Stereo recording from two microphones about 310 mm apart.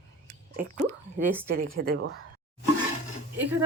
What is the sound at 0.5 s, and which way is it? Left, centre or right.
Speech, centre.